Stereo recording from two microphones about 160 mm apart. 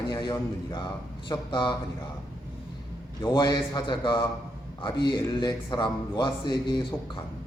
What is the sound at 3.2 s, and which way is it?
A man's voice, 30° left (ahead or behind).